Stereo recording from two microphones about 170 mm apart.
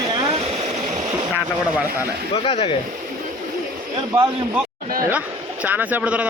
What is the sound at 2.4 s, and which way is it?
Speech, 35° left (ahead or behind).